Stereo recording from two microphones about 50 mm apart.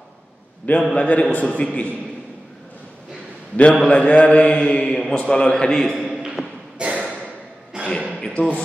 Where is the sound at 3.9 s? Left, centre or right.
Left.